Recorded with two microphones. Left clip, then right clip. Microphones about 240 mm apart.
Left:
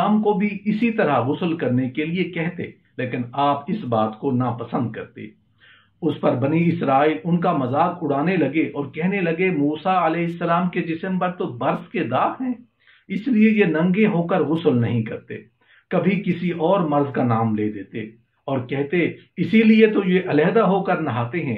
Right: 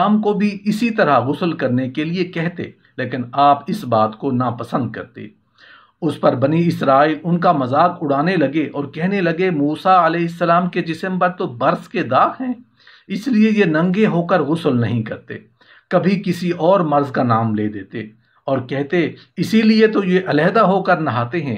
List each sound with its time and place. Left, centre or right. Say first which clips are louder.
0.0 s speech: right 3 dB; right